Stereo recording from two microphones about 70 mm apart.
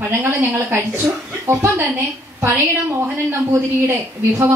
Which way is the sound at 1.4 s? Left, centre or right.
Right.